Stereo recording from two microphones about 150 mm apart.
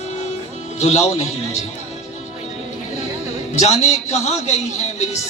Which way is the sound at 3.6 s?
45° left (ahead or behind).